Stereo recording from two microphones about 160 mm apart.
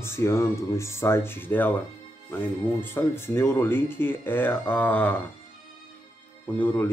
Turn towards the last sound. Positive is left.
turn(degrees=10)  # may be behind; listen again after turning